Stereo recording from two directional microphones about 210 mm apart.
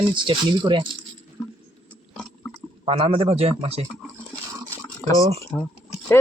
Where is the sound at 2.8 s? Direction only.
25° right (ahead or behind).